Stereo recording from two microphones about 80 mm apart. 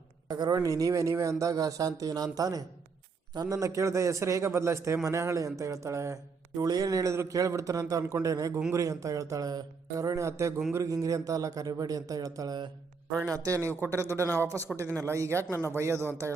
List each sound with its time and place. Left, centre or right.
0.3 s a man's voice: right
6.6 s a man's voice: right